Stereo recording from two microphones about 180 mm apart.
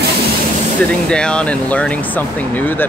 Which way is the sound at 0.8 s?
5° left (ahead or behind).